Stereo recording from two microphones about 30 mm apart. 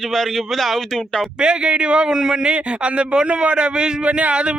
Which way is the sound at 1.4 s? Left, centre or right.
Right.